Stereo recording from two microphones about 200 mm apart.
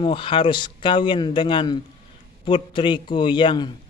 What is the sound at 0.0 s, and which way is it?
A man's voice, 25° left (ahead or behind).